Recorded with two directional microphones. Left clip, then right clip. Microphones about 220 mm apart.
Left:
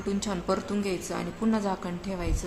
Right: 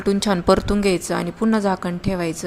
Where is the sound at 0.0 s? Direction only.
35° right (ahead or behind).